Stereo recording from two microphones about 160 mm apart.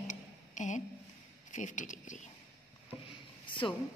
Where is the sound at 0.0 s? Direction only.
50° left (ahead or behind).